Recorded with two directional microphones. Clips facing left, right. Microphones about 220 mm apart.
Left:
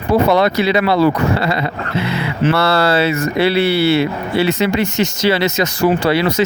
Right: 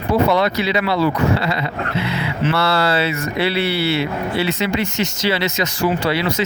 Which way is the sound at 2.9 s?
45° left (ahead or behind).